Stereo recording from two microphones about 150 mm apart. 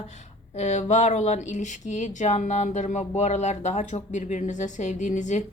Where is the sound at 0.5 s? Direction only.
50° left (ahead or behind).